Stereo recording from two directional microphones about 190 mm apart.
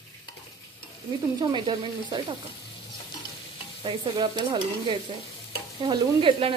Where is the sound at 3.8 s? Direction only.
25° right (ahead or behind).